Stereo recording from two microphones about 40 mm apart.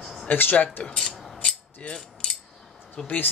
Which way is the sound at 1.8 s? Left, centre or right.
Left.